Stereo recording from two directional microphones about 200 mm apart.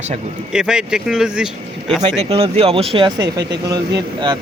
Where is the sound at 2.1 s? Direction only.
30° right (ahead or behind).